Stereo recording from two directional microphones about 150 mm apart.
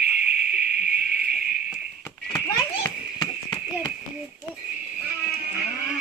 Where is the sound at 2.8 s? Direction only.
25° left (ahead or behind).